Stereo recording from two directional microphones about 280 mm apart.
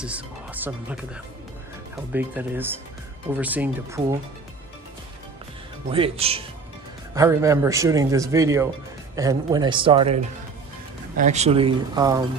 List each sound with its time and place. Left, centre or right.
0.0 s speech: centre
5.9 s speech: centre